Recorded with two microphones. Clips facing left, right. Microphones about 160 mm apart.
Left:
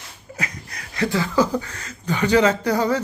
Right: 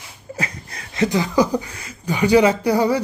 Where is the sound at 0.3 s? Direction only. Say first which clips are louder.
Right 2 dB; 30° right (ahead or behind).